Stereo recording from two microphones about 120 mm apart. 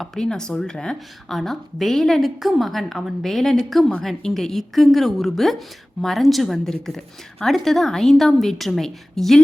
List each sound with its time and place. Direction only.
0.0 s a woman's voice: 5° left (ahead or behind)